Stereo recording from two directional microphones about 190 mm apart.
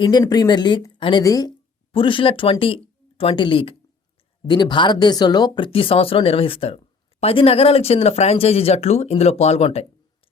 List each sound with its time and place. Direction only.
0.0 s a woman's voice: 20° left (ahead or behind)